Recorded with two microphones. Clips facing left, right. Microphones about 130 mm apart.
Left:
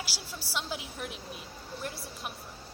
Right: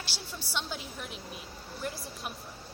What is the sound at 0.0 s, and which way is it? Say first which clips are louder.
A woman's voice: left 1 dB; 5° left (ahead or behind).